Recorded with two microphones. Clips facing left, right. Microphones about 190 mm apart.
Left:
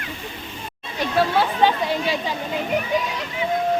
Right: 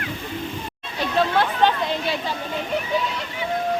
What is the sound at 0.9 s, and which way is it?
Speech, 10° left (ahead or behind).